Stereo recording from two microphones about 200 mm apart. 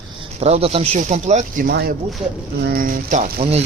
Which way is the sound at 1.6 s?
55° right (ahead or behind).